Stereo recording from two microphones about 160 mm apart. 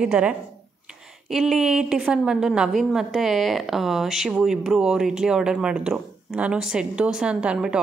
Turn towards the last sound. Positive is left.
turn(degrees=-5)  # may be behind; listen again after turning